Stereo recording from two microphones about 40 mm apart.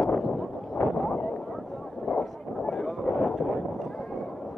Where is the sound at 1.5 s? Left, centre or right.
Centre.